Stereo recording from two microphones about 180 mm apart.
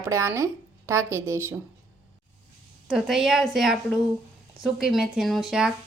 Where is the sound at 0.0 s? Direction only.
15° right (ahead or behind).